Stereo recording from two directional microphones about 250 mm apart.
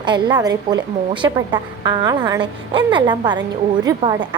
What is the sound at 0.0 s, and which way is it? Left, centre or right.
A woman's voice, centre.